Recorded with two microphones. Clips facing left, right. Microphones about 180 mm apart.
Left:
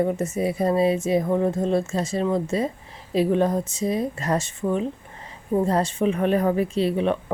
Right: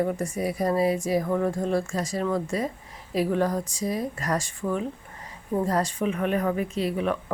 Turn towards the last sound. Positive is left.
turn(degrees=25)  # may be behind; listen again after turning